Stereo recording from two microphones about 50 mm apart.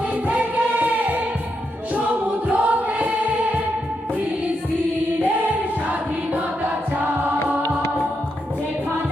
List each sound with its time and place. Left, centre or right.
0.3 s music: right
2.5 s choir: right